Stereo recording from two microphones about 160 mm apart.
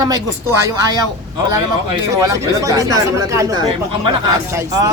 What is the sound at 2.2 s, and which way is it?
Speech, 20° right (ahead or behind).